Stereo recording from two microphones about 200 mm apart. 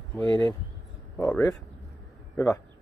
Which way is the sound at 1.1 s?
10° left (ahead or behind).